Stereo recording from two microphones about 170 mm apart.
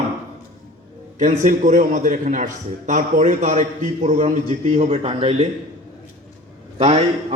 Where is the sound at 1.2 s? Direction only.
45° right (ahead or behind).